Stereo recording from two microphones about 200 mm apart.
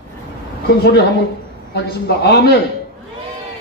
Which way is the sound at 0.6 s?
55° left (ahead or behind).